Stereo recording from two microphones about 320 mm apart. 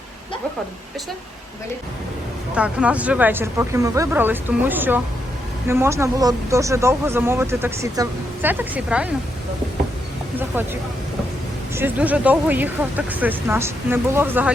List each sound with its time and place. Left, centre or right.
2.6 s speech: centre
11.7 s speech: centre